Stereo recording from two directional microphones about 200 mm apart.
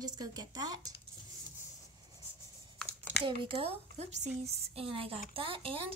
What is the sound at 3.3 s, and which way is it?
Speech, 25° right (ahead or behind).